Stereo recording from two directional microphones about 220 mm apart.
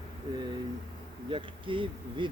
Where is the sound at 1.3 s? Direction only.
25° right (ahead or behind).